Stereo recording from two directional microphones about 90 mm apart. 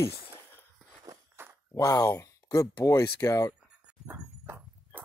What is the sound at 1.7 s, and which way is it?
Speech, 40° left (ahead or behind).